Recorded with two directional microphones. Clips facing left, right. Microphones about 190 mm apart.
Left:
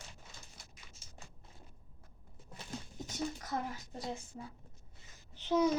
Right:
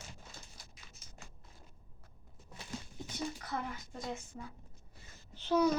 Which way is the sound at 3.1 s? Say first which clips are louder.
Left 1 dB; 40° left (ahead or behind).